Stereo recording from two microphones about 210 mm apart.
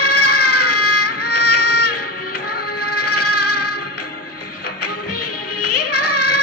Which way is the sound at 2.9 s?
90° left.